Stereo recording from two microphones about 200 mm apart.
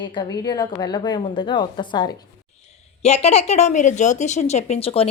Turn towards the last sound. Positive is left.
turn(degrees=30)  # may be behind; listen again after turning